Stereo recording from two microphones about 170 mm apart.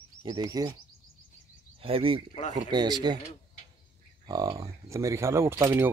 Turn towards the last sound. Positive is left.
turn(degrees=-15)  # may be behind; listen again after turning